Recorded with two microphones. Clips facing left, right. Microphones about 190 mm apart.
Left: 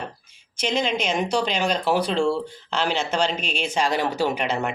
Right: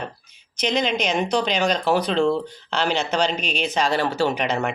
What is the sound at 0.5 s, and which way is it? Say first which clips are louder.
Speech: right 1 dB; 5° left (ahead or behind).